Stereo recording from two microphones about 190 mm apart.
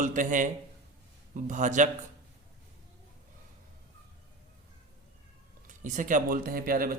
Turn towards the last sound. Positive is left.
turn(degrees=-50)  # may be behind; listen again after turning